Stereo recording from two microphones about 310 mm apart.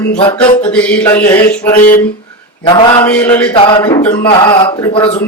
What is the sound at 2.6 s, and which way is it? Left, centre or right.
Speech, centre.